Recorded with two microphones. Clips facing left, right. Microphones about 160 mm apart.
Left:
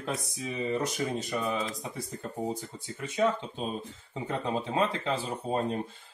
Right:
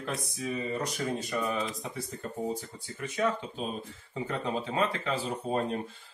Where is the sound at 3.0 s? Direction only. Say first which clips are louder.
Left 2 dB; 25° left (ahead or behind).